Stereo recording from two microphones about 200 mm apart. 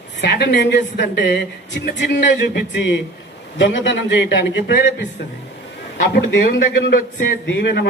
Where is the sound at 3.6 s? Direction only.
65° left (ahead or behind).